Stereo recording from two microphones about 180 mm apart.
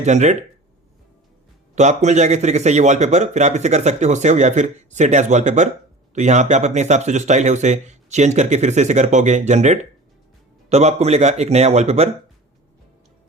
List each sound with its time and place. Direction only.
0.0 s speech: 40° right (ahead or behind)
1.7 s speech: 40° right (ahead or behind)